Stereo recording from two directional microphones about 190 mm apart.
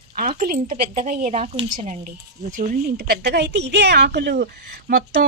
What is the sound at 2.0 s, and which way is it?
Speech, 45° right (ahead or behind).